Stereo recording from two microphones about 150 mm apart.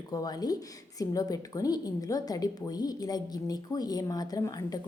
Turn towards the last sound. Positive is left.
turn(degrees=25)  # may be behind; listen again after turning